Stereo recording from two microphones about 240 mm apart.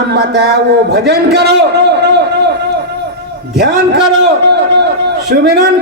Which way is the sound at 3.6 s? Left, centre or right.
Right.